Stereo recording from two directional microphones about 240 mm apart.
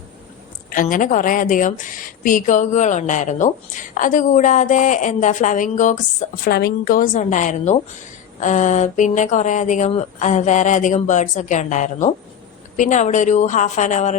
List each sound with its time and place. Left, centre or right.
0.7 s a woman's voice: left